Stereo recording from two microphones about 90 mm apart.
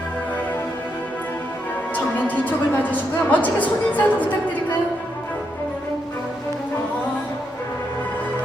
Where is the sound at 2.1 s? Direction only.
20° left (ahead or behind).